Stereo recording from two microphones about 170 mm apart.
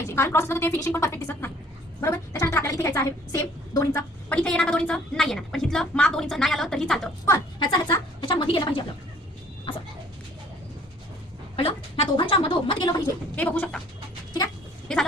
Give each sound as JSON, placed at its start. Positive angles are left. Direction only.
{"t": 0.1, "sound": "a woman's voice", "side_deg": 15}
{"t": 7.3, "sound": "a woman's voice", "side_deg": 25}
{"t": 9.7, "sound": "a sound", "side_deg": 30}
{"t": 11.5, "sound": "a woman's voice", "side_deg": 30}
{"t": 13.3, "sound": "a woman's voice", "side_deg": 10}